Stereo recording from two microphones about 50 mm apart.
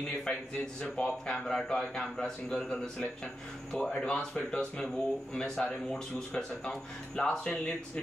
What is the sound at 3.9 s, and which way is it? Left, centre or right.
Speech, centre.